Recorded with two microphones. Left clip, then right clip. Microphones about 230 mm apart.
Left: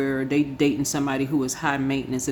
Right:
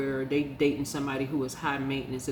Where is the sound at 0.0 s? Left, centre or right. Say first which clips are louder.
Left 5 dB; left.